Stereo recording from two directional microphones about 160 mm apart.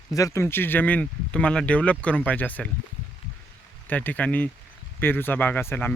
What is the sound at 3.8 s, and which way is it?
Speech, 10° left (ahead or behind).